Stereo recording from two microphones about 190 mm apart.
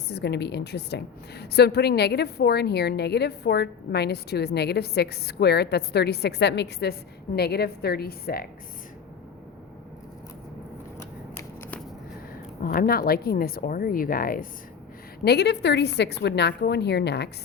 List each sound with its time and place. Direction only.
0.1 s a woman's voice: 60° left (ahead or behind)
11.3 s a sound: 10° left (ahead or behind)
12.6 s speech: 50° left (ahead or behind)
15.2 s a woman's voice: 60° left (ahead or behind)